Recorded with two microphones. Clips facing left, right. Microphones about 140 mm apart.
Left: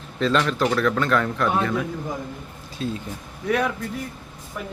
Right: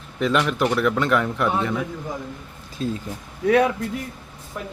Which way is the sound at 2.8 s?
40° right (ahead or behind).